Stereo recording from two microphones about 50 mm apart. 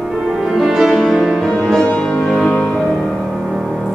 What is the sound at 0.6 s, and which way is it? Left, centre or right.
Music, centre.